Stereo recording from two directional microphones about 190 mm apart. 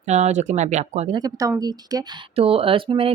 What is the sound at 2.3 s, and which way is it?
Speech, 30° right (ahead or behind).